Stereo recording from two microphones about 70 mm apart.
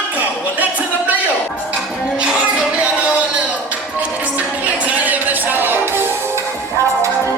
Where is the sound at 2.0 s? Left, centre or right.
Centre; by 7.3 s right.